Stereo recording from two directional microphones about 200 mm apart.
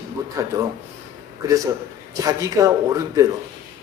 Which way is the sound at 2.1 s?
15° right (ahead or behind).